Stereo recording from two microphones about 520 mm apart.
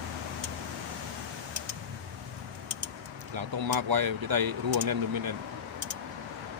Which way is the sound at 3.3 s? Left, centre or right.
Right.